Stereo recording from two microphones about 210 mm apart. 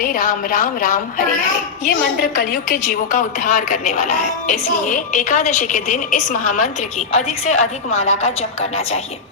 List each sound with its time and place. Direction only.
0.0 s a woman's voice: 40° left (ahead or behind)